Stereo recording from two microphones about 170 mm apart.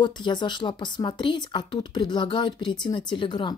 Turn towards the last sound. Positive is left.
turn(degrees=30)  # may be behind; listen again after turning